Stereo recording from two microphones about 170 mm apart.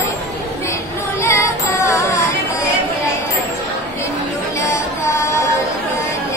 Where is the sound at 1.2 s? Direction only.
15° left (ahead or behind).